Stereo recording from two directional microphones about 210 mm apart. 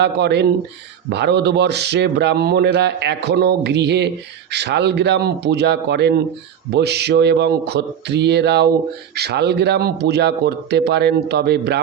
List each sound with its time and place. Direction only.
0.0 s speech: 55° right (ahead or behind)